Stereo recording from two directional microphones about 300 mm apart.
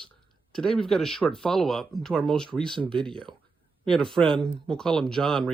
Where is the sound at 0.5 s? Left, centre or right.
Centre.